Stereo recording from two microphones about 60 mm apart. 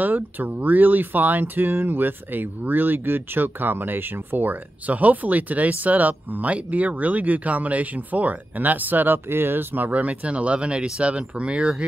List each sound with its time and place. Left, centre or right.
0.0 s speech: right
9.8 s speech: right